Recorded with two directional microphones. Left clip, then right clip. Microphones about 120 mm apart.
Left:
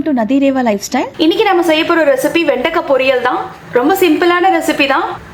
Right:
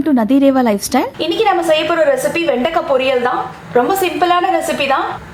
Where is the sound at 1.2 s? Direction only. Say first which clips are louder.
Left 5 dB; 35° left (ahead or behind).